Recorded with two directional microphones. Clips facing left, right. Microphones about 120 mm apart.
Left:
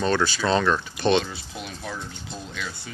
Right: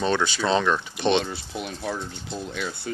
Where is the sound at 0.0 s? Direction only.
20° right (ahead or behind).